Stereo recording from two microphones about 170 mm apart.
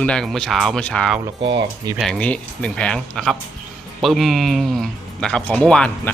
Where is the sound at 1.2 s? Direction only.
25° right (ahead or behind).